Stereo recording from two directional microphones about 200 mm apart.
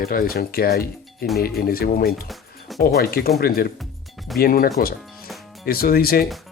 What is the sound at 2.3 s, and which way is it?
Music, centre (ahead or behind).